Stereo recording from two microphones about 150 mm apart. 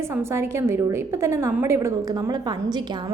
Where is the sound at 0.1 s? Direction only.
15° right (ahead or behind).